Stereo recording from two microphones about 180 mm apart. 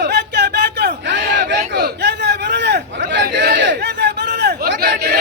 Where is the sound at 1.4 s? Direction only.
60° right (ahead or behind).